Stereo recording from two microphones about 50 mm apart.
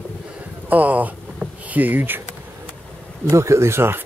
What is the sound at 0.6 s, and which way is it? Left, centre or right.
Speech, right.